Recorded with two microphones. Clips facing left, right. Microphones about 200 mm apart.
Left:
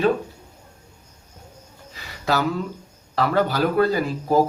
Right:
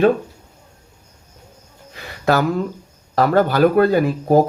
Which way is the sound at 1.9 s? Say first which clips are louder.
Right 6 dB; 55° right (ahead or behind).